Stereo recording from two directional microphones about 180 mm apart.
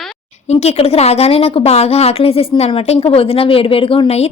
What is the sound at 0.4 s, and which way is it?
A woman's voice, 35° left (ahead or behind).